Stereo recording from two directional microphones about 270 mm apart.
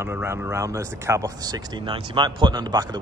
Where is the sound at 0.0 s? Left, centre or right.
Centre.